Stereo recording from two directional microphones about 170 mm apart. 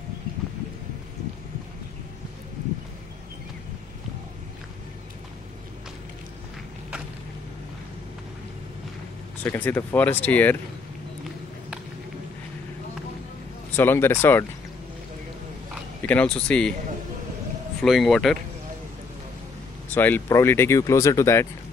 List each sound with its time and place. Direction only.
9.4 s speech: 10° left (ahead or behind)
13.7 s speech: 15° left (ahead or behind)
16.0 s speech: 10° left (ahead or behind)
17.8 s speech: centre (ahead or behind)
19.9 s speech: 10° left (ahead or behind)